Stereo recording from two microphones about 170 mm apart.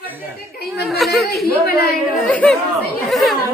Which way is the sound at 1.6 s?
60° left (ahead or behind).